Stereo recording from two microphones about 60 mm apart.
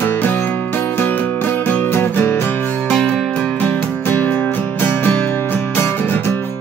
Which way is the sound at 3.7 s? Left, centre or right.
Left.